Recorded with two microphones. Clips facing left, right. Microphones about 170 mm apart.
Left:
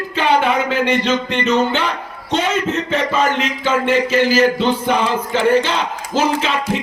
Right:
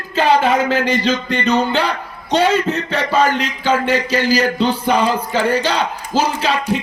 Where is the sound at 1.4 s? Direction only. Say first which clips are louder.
Right 1 dB; 35° right (ahead or behind).